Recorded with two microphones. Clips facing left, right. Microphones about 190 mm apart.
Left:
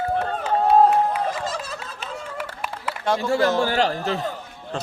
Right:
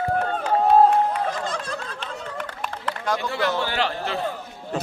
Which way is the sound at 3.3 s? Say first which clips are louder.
Left 5 dB; 45° left (ahead or behind).